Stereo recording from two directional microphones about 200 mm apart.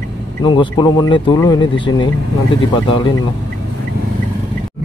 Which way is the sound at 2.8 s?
25° left (ahead or behind).